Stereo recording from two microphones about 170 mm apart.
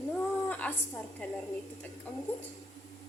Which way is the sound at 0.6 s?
5° left (ahead or behind).